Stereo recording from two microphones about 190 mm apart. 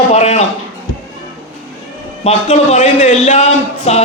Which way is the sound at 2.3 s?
35° left (ahead or behind).